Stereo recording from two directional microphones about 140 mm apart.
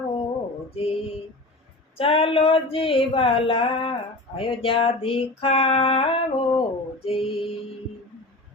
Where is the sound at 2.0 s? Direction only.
40° left (ahead or behind).